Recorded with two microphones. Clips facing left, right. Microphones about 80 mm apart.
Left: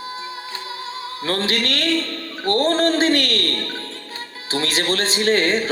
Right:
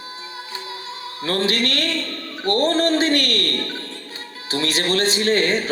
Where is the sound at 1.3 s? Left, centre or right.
Left.